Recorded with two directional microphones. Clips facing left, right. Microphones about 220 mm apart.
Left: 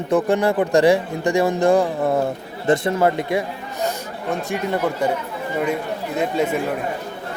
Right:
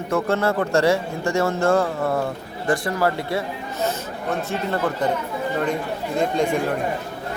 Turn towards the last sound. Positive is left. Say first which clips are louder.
# even
turn(degrees=5)  # may be behind; listen again after turning